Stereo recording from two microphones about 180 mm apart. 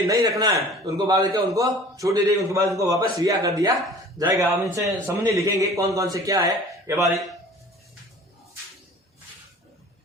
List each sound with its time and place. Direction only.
0.1 s a man's voice: 20° right (ahead or behind)